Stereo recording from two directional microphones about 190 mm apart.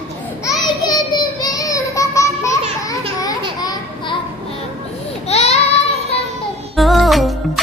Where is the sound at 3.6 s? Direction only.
20° left (ahead or behind).